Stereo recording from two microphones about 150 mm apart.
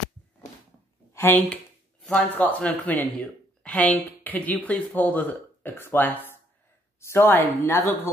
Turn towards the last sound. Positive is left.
turn(degrees=15)  # may be behind; listen again after turning